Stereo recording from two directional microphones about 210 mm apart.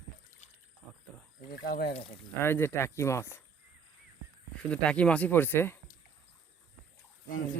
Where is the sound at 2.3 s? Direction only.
10° left (ahead or behind).